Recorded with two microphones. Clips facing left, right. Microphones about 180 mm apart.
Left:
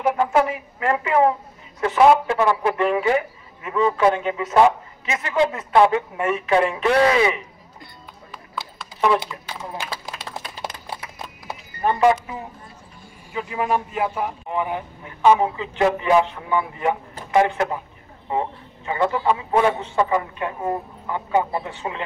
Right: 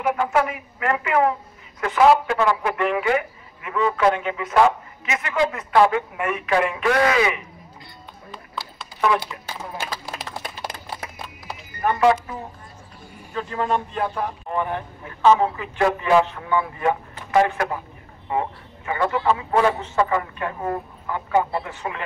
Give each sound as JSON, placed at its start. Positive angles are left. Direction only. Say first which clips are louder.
{"t": 0.0, "sound": "a man's voice", "louder": "left 2 dB", "side_deg": 25}
{"t": 9.0, "sound": "a man's voice", "louder": "left 2 dB", "side_deg": 20}
{"t": 11.4, "sound": "a sound", "louder": "left 1 dB", "side_deg": 20}
{"t": 13.3, "sound": "a man's voice", "louder": "left 1 dB", "side_deg": 10}
{"t": 19.5, "sound": "a man's voice", "louder": "left 1 dB", "side_deg": 15}